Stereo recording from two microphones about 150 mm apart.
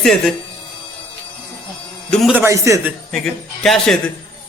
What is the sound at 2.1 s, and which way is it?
Speech, 5° left (ahead or behind).